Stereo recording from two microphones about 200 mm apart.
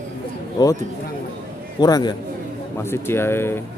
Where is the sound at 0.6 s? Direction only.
20° left (ahead or behind).